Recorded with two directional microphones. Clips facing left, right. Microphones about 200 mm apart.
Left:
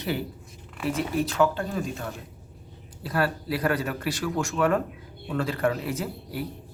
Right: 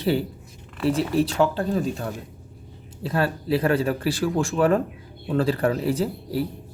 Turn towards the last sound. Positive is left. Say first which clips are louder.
# right 7 dB
turn(degrees=-30)  # may be behind; listen again after turning